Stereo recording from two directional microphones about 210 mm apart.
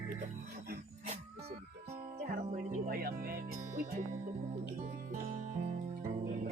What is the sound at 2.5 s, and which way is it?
Music, 45° right (ahead or behind).